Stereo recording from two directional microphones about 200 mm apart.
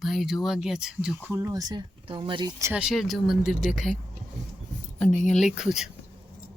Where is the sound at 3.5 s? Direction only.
40° left (ahead or behind).